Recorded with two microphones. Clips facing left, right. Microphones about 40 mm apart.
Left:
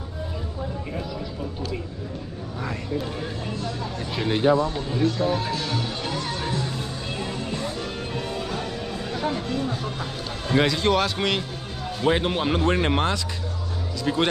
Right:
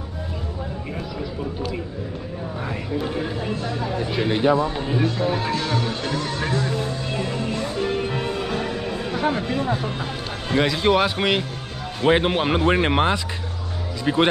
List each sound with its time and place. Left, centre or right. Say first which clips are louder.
2.6 s a sound: right 1 dB; centre
4.7 s speech: right 1 dB; right; by 6.3 s centre
6.4 s music: right 5 dB; right
7.8 s music: right 7 dB; right
10.6 s speech: right 3 dB; centre